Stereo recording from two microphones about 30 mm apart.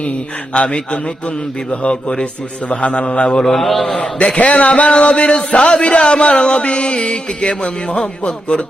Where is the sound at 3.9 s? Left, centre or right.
Left.